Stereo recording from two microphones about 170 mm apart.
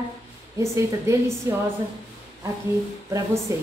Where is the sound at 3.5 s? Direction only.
20° right (ahead or behind).